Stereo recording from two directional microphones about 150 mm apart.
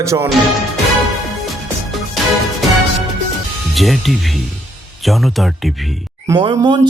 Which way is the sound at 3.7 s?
Centre (ahead or behind).